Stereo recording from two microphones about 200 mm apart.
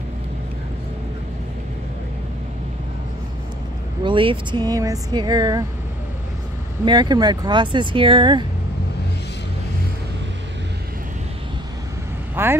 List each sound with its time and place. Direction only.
4.0 s speech: 25° right (ahead or behind)
6.8 s speech: 20° right (ahead or behind)
12.4 s speech: 10° right (ahead or behind)